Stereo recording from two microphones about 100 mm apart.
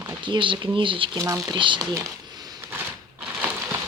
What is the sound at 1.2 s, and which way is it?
Speech, 35° right (ahead or behind).